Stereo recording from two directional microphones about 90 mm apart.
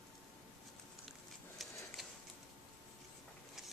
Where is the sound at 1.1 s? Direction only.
Centre (ahead or behind).